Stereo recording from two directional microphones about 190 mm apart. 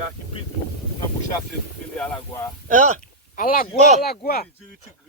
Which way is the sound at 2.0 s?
10° left (ahead or behind).